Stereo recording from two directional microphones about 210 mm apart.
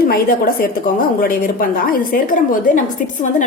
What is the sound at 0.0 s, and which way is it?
A woman's voice, 45° left (ahead or behind).